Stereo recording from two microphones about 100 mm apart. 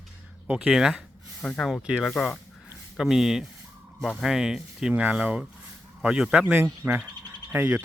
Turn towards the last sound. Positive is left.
turn(degrees=-20)  # may be behind; listen again after turning